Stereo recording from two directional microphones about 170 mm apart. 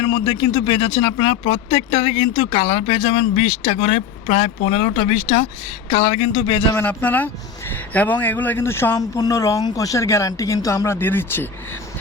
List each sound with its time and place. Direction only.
0.0 s speech: 30° left (ahead or behind)
6.7 s a man's voice: 10° left (ahead or behind)